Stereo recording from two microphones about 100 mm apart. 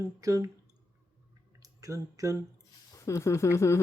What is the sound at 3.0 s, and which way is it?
Speech, 30° left (ahead or behind).